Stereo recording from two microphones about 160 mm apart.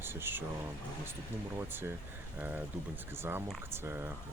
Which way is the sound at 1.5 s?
15° right (ahead or behind).